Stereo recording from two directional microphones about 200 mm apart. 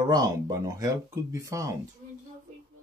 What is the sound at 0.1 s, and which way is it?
Speech, 20° right (ahead or behind).